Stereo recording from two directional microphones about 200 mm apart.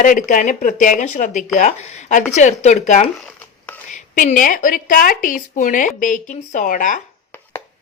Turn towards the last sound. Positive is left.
turn(degrees=40)  # may be behind; listen again after turning